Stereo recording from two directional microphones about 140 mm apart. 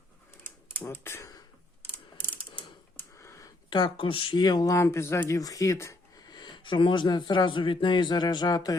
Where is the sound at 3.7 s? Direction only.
35° left (ahead or behind).